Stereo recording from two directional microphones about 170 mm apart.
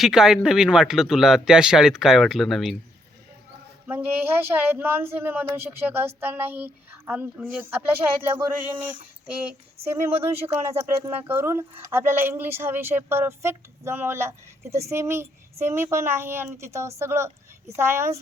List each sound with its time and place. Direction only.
0.0 s speech: 5° right (ahead or behind)
3.8 s speech: 10° right (ahead or behind)
9.9 s speech: 15° right (ahead or behind)
10.2 s speech: 35° right (ahead or behind)
10.5 s speech: 15° right (ahead or behind)